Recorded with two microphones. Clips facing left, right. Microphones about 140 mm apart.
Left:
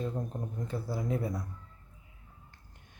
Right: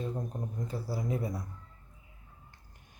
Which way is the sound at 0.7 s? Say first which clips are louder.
Left 2 dB; 10° right (ahead or behind).